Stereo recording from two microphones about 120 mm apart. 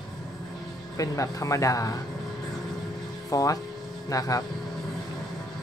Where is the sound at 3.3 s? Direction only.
30° left (ahead or behind).